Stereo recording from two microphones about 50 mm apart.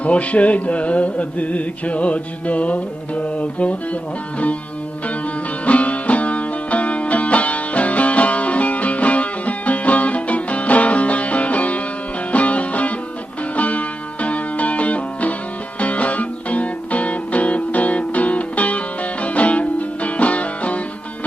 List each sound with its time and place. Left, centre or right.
0.0 s music: left
5.6 s music: left